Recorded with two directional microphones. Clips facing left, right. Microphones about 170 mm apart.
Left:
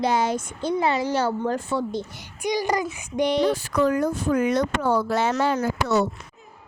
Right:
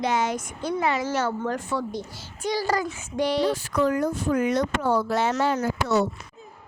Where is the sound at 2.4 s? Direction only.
15° left (ahead or behind).